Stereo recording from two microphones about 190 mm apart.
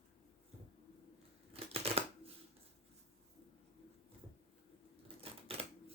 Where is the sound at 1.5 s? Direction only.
30° right (ahead or behind).